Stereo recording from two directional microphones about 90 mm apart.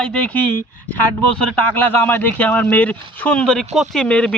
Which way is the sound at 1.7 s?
20° left (ahead or behind).